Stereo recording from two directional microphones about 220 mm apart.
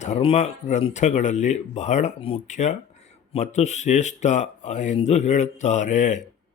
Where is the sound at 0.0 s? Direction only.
30° left (ahead or behind).